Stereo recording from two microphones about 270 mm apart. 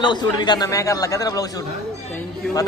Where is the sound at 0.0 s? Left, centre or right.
Centre.